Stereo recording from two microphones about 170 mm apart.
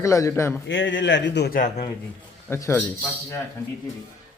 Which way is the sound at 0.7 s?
90° left.